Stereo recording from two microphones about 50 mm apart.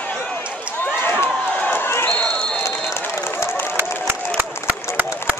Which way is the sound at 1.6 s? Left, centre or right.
Left.